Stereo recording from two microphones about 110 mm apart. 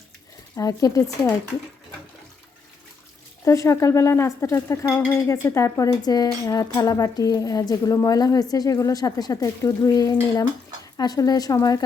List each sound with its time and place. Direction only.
0.5 s speech: 30° left (ahead or behind)
3.4 s speech: 25° left (ahead or behind)
5.9 s speech: 35° left (ahead or behind)